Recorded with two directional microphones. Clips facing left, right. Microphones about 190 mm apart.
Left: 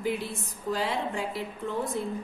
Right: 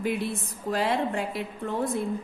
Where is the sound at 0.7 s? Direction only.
60° right (ahead or behind).